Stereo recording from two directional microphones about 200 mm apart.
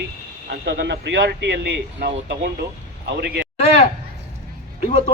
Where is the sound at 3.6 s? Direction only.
30° left (ahead or behind).